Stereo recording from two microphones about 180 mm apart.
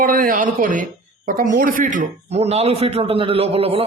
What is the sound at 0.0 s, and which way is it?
Speech, 50° right (ahead or behind).